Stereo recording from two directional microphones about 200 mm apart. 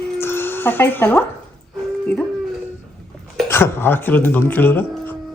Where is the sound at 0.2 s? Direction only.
10° left (ahead or behind).